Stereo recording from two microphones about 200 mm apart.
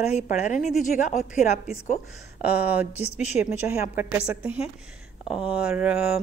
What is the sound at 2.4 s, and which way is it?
A woman's voice, 10° right (ahead or behind).